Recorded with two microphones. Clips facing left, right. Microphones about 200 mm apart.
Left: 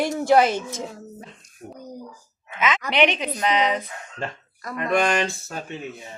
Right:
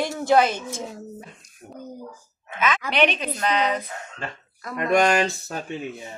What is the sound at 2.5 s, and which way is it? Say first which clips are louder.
A woman's voice: left 1 dB; 20° left (ahead or behind).